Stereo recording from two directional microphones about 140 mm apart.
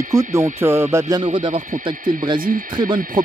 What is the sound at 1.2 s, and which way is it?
Speech, 40° right (ahead or behind).